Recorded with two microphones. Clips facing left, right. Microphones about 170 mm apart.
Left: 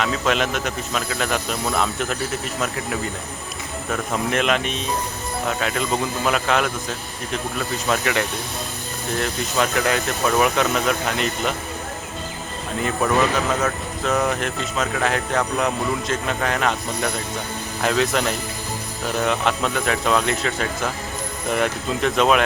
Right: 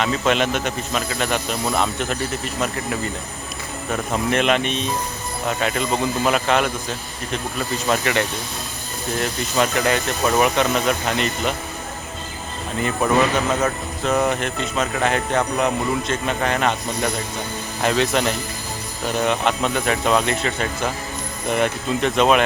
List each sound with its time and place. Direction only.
0.0 s speech: centre (ahead or behind)
4.1 s speech: centre (ahead or behind)
7.9 s speech: centre (ahead or behind)
12.8 s speech: centre (ahead or behind)